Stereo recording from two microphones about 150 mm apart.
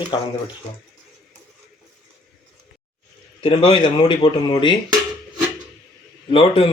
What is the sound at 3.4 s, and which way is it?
Speech, 35° left (ahead or behind).